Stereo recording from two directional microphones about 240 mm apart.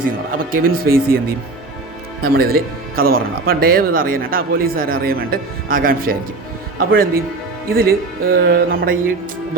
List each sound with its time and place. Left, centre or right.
0.5 s speech: right
2.2 s speech: right